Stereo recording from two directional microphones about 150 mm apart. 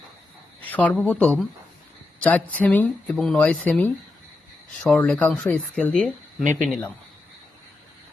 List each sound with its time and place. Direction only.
0.7 s speech: 10° left (ahead or behind)